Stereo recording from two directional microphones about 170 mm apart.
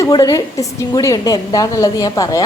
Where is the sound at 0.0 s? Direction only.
20° left (ahead or behind).